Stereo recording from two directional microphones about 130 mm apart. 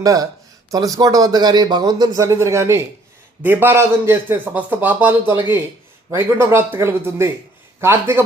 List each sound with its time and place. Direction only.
0.0 s speech: 30° right (ahead or behind)